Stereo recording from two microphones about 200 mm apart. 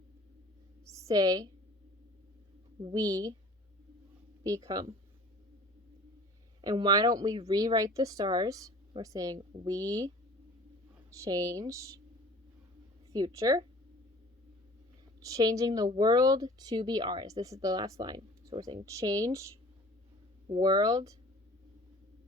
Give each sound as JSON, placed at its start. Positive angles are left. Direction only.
{"t": 0.9, "sound": "a woman's voice", "side_deg": -15}
{"t": 2.8, "sound": "speech", "side_deg": -15}
{"t": 4.4, "sound": "speech", "side_deg": -15}
{"t": 6.6, "sound": "speech", "side_deg": -20}
{"t": 11.2, "sound": "speech", "side_deg": -15}
{"t": 13.1, "sound": "speech", "side_deg": -20}
{"t": 15.2, "sound": "speech", "side_deg": -15}
{"t": 20.5, "sound": "speech", "side_deg": -20}